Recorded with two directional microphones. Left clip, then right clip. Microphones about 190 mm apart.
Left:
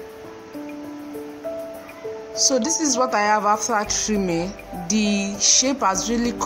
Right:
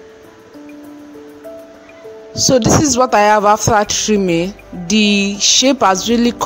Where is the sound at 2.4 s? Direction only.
45° right (ahead or behind).